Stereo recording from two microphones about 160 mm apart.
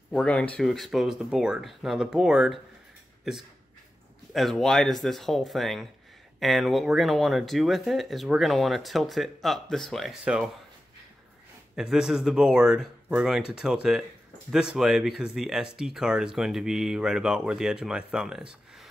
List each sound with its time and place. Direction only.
0.1 s speech: 5° left (ahead or behind)
4.3 s speech: centre (ahead or behind)
11.7 s speech: 5° right (ahead or behind)